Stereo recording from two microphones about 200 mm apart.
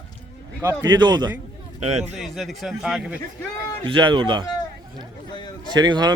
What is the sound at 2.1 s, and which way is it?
Speech, centre (ahead or behind).